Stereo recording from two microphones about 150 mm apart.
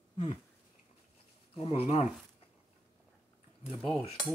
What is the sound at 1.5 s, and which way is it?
Speech, 40° left (ahead or behind).